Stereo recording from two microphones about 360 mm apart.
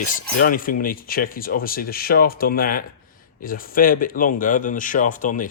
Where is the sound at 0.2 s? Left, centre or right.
Left.